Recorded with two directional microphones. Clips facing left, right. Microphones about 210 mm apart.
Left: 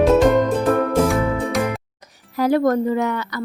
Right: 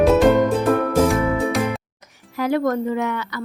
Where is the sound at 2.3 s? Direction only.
35° left (ahead or behind).